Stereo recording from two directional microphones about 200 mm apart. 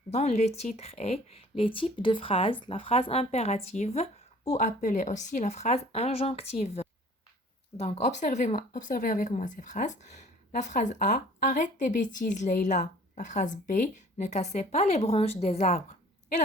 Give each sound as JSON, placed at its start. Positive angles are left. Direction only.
{"t": 0.1, "sound": "speech", "side_deg": 35}